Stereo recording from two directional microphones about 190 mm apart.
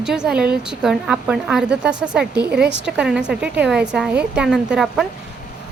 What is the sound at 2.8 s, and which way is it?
Speech, 5° right (ahead or behind).